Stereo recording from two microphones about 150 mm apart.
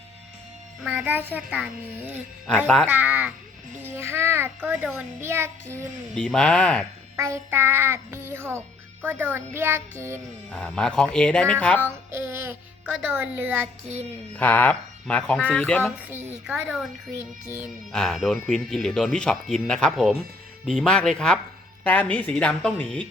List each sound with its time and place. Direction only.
0.8 s a child's voice: 5° right (ahead or behind)
6.1 s speech: 5° left (ahead or behind)
7.2 s a child's voice: 20° right (ahead or behind)
10.5 s speech: 5° left (ahead or behind)
11.9 s a child's voice: 15° right (ahead or behind)
14.3 s speech: 10° left (ahead or behind)
16.0 s a child's voice: 10° right (ahead or behind)
17.9 s speech: centre (ahead or behind)